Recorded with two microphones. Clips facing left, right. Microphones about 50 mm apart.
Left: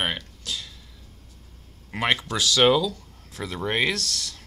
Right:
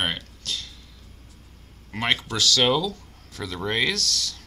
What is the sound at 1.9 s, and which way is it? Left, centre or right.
Speech, centre.